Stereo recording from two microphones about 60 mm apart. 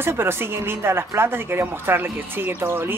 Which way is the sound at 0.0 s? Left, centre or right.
Right.